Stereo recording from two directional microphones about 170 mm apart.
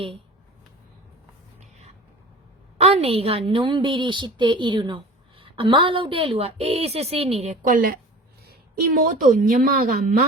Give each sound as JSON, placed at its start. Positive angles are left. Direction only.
{"t": 2.7, "sound": "a woman's voice", "side_deg": -40}